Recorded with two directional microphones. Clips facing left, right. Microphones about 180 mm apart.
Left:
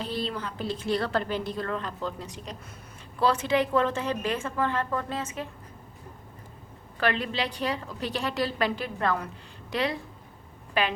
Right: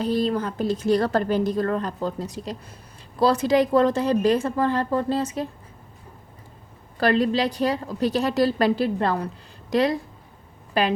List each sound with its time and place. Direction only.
0.0 s a woman's voice: 45° right (ahead or behind)
7.0 s a woman's voice: 40° right (ahead or behind)